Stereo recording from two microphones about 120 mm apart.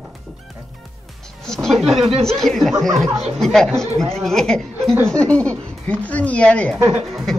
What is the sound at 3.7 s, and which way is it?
Speech, 25° right (ahead or behind).